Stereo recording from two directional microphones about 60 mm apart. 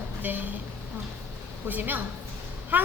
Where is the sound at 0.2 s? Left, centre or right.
Right.